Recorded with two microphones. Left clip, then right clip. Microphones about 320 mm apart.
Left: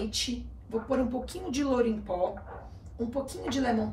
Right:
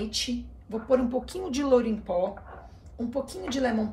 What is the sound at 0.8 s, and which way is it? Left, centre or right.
Speech, centre.